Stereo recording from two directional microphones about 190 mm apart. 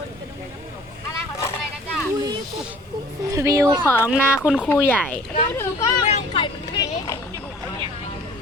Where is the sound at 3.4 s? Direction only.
15° right (ahead or behind).